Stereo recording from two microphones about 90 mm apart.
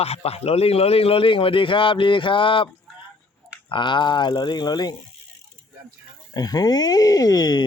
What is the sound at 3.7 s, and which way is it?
Speech, 65° left (ahead or behind).